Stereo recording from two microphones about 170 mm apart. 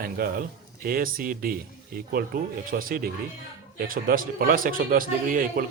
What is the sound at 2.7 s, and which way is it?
Speech, 55° right (ahead or behind).